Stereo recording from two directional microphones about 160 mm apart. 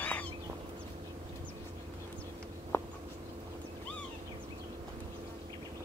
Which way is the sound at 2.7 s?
15° left (ahead or behind).